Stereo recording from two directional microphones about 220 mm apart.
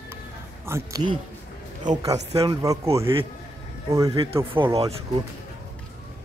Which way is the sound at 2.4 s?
15° right (ahead or behind).